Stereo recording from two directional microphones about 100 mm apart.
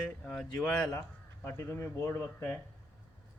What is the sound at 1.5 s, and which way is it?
Speech, 25° left (ahead or behind).